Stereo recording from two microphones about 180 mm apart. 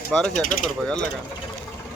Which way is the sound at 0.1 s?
5° left (ahead or behind).